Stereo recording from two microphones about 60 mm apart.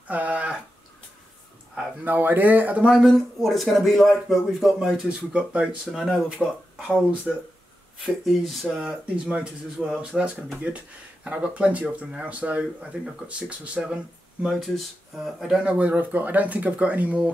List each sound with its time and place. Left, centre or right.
0.1 s a sound: right
2.0 s speech: right
2.9 s speech: centre
5.0 s speech: centre
5.9 s speech: centre
6.4 s speech: centre
7.3 s speech: centre
8.0 s speech: centre
8.8 s speech: centre
15.1 s speech: centre
15.6 s speech: right